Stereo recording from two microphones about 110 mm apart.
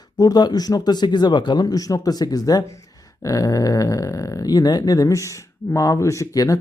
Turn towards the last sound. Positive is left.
turn(degrees=30)  # may be behind; listen again after turning